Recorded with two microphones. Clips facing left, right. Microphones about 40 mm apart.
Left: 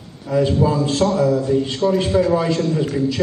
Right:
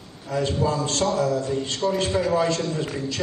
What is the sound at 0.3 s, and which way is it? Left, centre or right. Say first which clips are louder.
A man's voice: left 6 dB; centre.